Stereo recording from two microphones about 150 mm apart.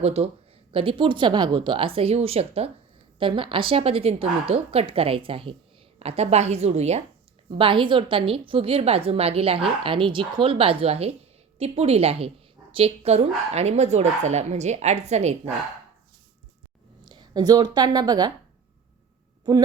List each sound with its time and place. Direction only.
0.0 s a woman's voice: 45° right (ahead or behind)
7.6 s a woman's voice: 35° right (ahead or behind)
17.1 s a woman's voice: 30° right (ahead or behind)